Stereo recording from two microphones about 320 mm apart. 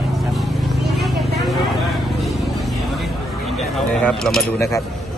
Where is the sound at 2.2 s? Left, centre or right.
Centre.